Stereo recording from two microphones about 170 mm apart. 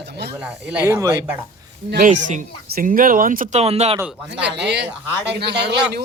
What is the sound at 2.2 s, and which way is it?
Speech, 50° right (ahead or behind).